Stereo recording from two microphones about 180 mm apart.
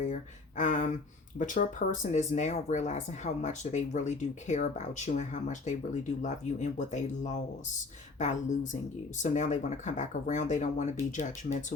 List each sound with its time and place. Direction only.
0.0 s speech: 45° left (ahead or behind)